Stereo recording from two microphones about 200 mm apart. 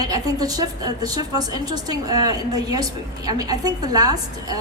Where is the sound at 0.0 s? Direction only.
20° right (ahead or behind).